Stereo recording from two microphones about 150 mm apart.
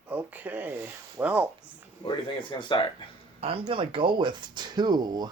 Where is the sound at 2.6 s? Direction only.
30° left (ahead or behind).